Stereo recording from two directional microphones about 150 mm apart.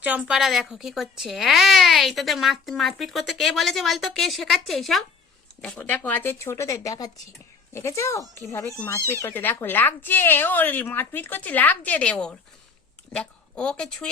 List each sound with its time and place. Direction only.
0.0 s a woman's voice: 10° right (ahead or behind)